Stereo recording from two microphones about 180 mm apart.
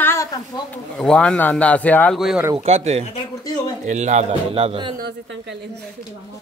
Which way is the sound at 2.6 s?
35° right (ahead or behind).